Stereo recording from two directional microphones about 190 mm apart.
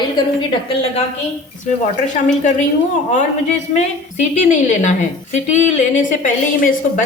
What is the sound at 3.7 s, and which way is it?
A woman's voice, 35° left (ahead or behind).